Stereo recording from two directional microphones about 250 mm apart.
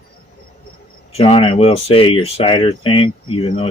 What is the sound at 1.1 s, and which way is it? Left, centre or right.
Speech, left.